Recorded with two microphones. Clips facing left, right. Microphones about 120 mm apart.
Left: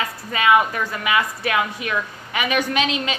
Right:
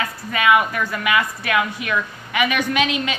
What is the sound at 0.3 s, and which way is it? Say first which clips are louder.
A woman's voice: even; 30° left (ahead or behind).